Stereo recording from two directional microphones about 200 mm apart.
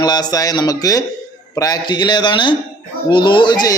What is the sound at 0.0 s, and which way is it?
A man's voice, 20° left (ahead or behind).